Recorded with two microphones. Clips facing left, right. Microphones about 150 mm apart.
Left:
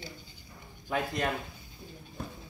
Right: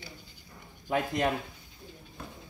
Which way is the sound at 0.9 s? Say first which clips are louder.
Right 3 dB; 20° right (ahead or behind).